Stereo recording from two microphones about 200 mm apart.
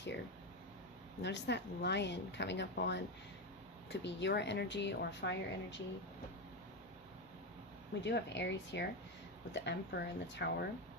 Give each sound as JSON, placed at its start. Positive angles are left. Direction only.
{"t": 1.2, "sound": "speech", "side_deg": 60}
{"t": 8.0, "sound": "speech", "side_deg": 60}